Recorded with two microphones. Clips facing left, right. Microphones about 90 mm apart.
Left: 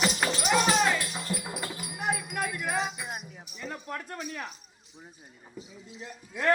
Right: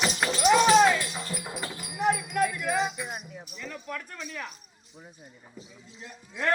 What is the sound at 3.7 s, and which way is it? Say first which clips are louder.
Speech: left 1 dB; 35° left (ahead or behind).